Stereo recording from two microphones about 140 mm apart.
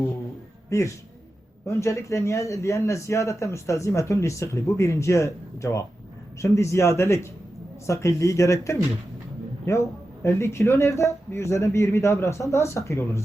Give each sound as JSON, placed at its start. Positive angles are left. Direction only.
{"t": 0.7, "sound": "speech", "side_deg": 20}